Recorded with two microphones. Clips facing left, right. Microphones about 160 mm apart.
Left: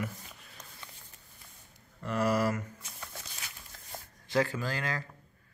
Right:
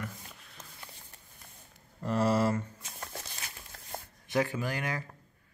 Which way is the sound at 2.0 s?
30° right (ahead or behind).